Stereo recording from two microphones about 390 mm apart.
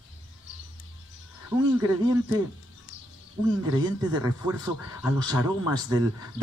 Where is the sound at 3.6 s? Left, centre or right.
Centre.